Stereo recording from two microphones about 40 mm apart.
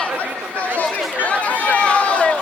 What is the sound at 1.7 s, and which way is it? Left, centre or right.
Run, left.